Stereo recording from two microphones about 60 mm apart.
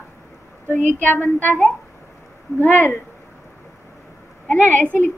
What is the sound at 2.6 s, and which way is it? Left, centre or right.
Speech, left.